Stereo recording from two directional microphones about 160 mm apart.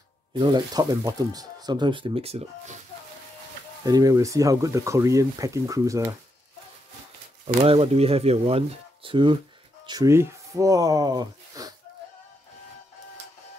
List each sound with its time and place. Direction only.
0.3 s speech: 30° right (ahead or behind)
3.8 s speech: 20° right (ahead or behind)
7.4 s speech: 35° right (ahead or behind)
9.8 s speech: 20° right (ahead or behind)